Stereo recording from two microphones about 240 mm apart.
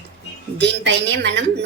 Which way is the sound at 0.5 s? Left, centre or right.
Right.